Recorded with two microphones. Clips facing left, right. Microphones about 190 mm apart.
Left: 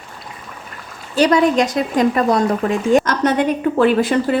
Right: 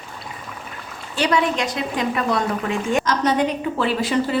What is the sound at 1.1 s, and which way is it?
A woman's voice, 40° left (ahead or behind).